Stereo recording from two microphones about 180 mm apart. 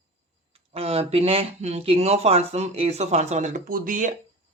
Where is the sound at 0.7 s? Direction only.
35° right (ahead or behind); by 4.1 s 50° right (ahead or behind).